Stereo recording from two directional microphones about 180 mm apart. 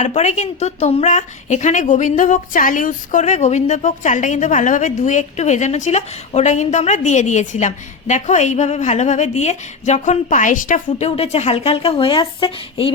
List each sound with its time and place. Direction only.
0.0 s a woman's voice: 40° left (ahead or behind)